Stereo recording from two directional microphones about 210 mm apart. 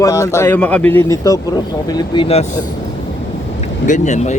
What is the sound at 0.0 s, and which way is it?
Speech, 15° left (ahead or behind).